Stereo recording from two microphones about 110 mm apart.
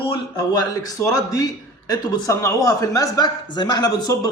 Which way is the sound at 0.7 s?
35° left (ahead or behind).